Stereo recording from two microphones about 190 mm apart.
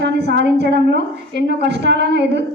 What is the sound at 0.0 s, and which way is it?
A woman's voice, 65° right (ahead or behind).